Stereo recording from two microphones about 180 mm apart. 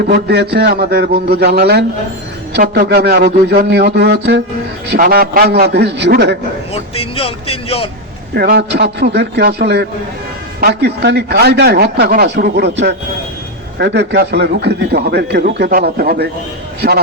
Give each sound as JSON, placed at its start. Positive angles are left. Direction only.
{"t": 0.0, "sound": "a man's voice", "side_deg": -70}
{"t": 4.9, "sound": "a man's voice", "side_deg": -60}
{"t": 6.7, "sound": "speech", "side_deg": 30}
{"t": 8.4, "sound": "a man's voice", "side_deg": -65}